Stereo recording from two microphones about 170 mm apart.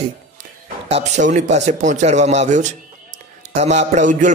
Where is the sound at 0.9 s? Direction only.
45° right (ahead or behind).